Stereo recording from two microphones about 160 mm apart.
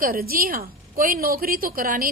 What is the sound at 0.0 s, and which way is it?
A woman's voice, 65° right (ahead or behind).